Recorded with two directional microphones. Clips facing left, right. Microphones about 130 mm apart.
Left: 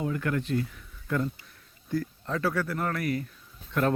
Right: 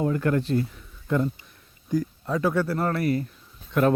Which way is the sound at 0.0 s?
40° right (ahead or behind).